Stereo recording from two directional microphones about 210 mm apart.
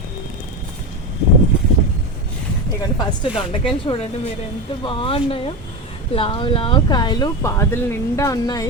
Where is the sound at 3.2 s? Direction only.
25° left (ahead or behind).